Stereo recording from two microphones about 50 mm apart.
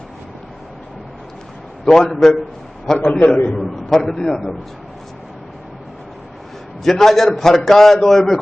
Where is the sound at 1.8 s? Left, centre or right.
Centre.